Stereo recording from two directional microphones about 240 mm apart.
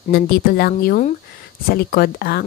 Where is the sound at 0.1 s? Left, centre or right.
Left.